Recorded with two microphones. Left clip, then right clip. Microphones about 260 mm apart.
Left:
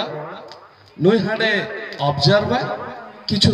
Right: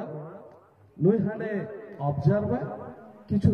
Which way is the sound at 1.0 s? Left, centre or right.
Left.